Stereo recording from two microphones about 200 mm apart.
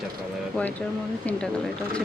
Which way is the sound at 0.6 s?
5° left (ahead or behind).